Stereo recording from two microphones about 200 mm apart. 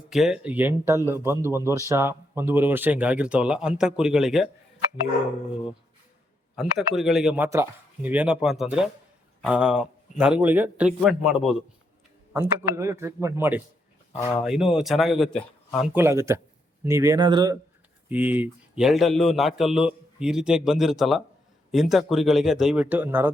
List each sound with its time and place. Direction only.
0.1 s speech: centre (ahead or behind)
6.6 s a man's voice: centre (ahead or behind)
16.0 s speech: 15° right (ahead or behind)
18.1 s a man's voice: 10° right (ahead or behind)